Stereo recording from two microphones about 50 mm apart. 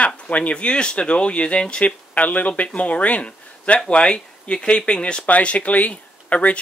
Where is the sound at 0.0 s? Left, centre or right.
Left.